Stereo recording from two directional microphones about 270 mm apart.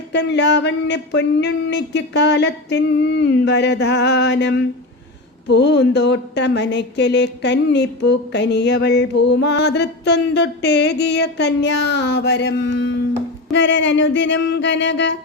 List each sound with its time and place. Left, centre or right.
0.1 s speech: left